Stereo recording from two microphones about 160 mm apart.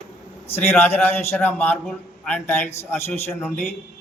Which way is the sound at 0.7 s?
10° left (ahead or behind).